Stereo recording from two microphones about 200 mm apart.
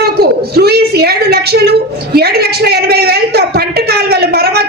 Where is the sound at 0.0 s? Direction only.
50° right (ahead or behind).